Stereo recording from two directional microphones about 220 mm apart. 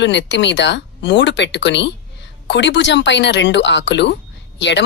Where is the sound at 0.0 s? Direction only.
55° left (ahead or behind).